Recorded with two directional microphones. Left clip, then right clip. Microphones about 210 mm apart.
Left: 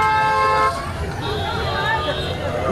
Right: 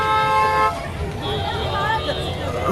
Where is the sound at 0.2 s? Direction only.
45° right (ahead or behind).